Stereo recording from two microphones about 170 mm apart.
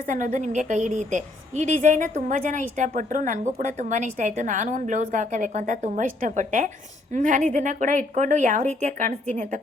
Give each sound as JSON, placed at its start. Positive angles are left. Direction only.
{"t": 0.1, "sound": "a woman's voice", "side_deg": -45}